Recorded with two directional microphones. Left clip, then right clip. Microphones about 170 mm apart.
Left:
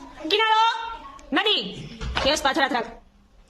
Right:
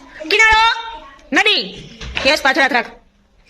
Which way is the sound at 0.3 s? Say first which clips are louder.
Right 8 dB; 15° right (ahead or behind).